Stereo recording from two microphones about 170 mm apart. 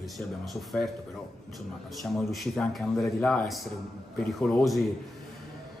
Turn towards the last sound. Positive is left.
turn(degrees=0)  # may be behind; listen again after turning